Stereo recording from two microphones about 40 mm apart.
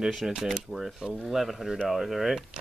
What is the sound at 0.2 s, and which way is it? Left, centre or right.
Speech, centre.